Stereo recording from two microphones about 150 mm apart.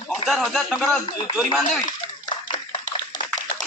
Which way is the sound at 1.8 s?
30° left (ahead or behind).